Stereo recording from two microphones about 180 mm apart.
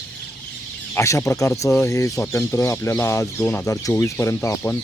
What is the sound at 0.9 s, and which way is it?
Speech, 15° left (ahead or behind).